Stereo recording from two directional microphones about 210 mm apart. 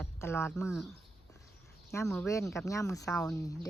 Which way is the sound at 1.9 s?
15° left (ahead or behind).